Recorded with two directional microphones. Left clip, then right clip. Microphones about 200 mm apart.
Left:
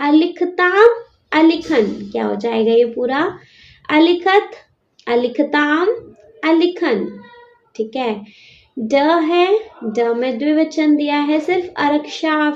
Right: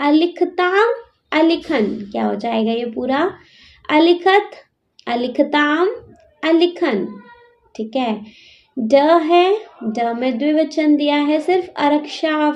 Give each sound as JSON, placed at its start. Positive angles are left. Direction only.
{"t": 0.0, "sound": "a woman's voice", "side_deg": -50}